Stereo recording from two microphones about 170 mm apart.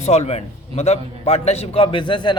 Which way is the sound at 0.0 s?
40° left (ahead or behind).